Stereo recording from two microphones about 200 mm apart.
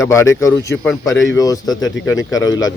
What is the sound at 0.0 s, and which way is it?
Speech, 15° left (ahead or behind).